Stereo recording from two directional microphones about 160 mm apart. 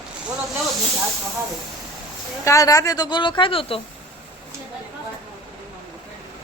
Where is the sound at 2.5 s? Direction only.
20° left (ahead or behind).